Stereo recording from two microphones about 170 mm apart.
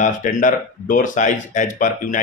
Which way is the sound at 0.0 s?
50° left (ahead or behind).